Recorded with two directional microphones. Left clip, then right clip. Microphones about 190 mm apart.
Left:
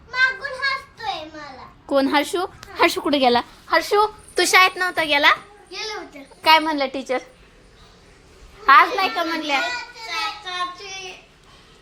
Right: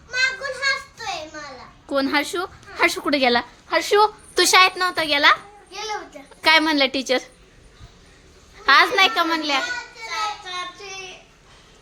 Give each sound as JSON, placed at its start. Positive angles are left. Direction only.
{"t": 0.1, "sound": "a sound", "side_deg": -25}
{"t": 1.9, "sound": "a woman's voice", "side_deg": 0}
{"t": 4.4, "sound": "a child's voice", "side_deg": -5}
{"t": 6.2, "sound": "a sound", "side_deg": -5}
{"t": 6.6, "sound": "a child's voice", "side_deg": -25}
{"t": 8.6, "sound": "a child's voice", "side_deg": -30}
{"t": 10.1, "sound": "child singing", "side_deg": -10}